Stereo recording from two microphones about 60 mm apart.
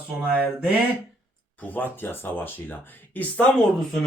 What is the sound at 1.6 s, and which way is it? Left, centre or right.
Speech, left.